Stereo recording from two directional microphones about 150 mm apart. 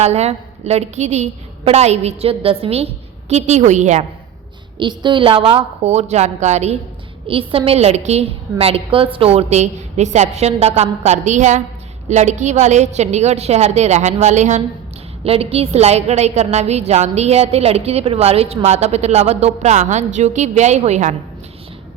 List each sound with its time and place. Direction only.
0.0 s a woman's voice: 45° right (ahead or behind)
4.8 s a woman's voice: 30° right (ahead or behind); by 21.2 s 50° right (ahead or behind)